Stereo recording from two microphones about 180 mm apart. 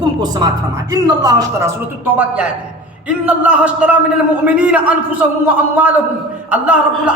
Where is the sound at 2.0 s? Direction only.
10° right (ahead or behind).